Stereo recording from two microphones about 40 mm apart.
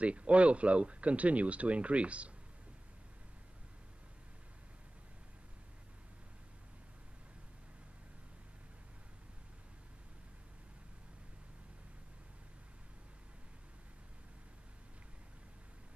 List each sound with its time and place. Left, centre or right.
0.0 s speech: right